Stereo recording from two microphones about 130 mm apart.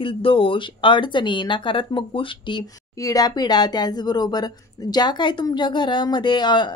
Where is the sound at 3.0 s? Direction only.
30° left (ahead or behind).